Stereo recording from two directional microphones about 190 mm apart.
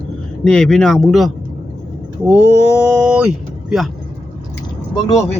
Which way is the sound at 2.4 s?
65° right (ahead or behind).